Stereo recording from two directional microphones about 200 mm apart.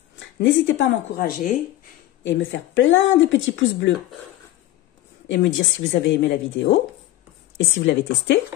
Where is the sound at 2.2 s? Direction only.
70° left (ahead or behind).